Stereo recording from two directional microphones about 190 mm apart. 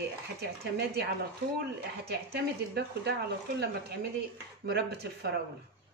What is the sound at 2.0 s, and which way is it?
Speech, 60° right (ahead or behind).